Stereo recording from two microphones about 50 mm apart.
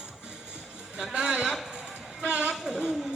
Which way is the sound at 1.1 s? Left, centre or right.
Centre.